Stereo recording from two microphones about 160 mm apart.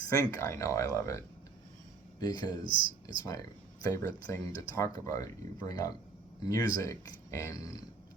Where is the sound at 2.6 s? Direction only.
30° right (ahead or behind).